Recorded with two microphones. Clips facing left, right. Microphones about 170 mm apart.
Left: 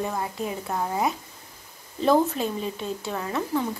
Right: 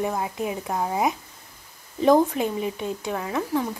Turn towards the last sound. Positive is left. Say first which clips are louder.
# right 1 dB
turn(degrees=-10)  # may be behind; listen again after turning